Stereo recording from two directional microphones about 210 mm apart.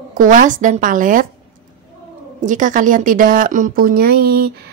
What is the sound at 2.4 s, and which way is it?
Speech, 35° right (ahead or behind).